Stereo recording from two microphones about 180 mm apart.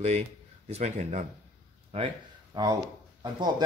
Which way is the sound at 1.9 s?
25° right (ahead or behind).